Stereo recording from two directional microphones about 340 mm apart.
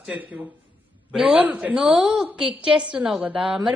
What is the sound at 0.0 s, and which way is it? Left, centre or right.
A woman's voice, centre.